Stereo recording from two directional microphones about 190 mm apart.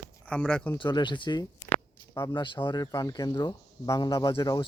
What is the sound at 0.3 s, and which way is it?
Speech, 5° left (ahead or behind).